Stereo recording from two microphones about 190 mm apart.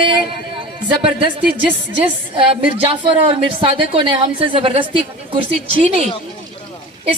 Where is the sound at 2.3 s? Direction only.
30° right (ahead or behind).